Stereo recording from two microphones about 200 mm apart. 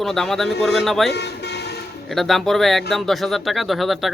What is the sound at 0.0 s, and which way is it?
Speech, centre (ahead or behind).